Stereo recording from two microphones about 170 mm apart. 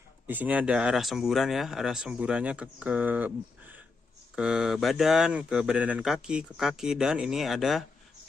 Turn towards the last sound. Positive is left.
turn(degrees=0)  # may be behind; listen again after turning